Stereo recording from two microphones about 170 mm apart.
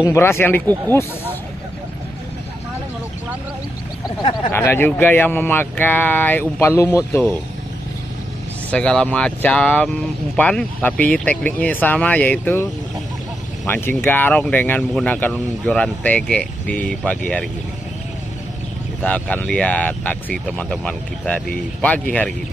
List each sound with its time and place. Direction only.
0.0 s speech: 15° left (ahead or behind)
4.5 s speech: 15° left (ahead or behind)
8.6 s speech: 5° left (ahead or behind)
13.7 s speech: 15° left (ahead or behind)
19.0 s speech: 5° left (ahead or behind)